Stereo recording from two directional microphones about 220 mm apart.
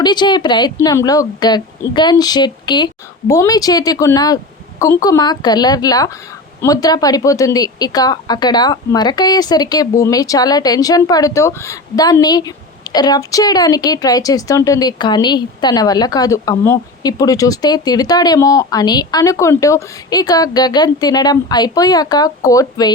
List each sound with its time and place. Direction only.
0.0 s a woman's voice: 20° left (ahead or behind)